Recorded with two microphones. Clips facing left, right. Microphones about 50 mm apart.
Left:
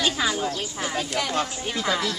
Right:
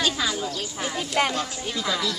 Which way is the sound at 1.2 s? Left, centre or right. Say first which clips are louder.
Right 7 dB; right.